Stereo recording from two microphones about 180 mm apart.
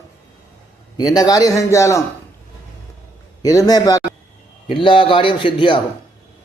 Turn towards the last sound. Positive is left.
turn(degrees=25)  # may be behind; listen again after turning